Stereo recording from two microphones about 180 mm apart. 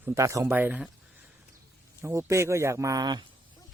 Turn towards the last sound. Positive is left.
turn(degrees=-20)  # may be behind; listen again after turning